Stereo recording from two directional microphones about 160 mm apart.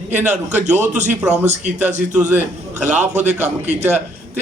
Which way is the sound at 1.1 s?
5° right (ahead or behind).